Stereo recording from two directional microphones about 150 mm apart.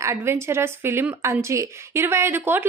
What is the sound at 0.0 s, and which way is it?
Speech, 20° right (ahead or behind).